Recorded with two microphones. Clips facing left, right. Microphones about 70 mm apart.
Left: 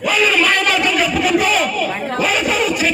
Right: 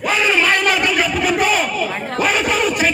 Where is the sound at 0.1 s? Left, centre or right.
Centre.